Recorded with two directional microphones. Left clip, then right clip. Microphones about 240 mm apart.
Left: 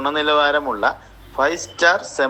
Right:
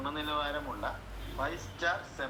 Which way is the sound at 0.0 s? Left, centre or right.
Left.